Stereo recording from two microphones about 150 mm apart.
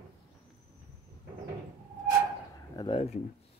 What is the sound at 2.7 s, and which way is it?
Speech, 35° left (ahead or behind).